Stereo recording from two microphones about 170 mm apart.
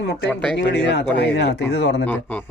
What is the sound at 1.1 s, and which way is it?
Speech, 75° left (ahead or behind).